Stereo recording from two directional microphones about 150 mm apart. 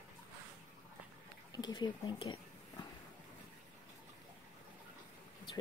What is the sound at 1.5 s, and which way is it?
Speech, 30° left (ahead or behind).